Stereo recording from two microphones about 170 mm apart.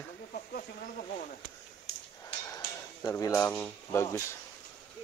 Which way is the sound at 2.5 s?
20° left (ahead or behind).